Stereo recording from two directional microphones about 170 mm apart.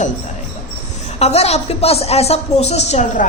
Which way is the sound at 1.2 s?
40° left (ahead or behind).